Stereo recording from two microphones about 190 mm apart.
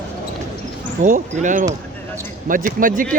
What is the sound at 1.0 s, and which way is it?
Speech, 40° right (ahead or behind).